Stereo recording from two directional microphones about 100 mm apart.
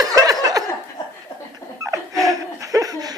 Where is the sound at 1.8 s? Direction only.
35° right (ahead or behind).